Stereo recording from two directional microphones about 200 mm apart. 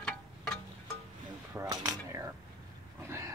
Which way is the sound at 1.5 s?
20° right (ahead or behind).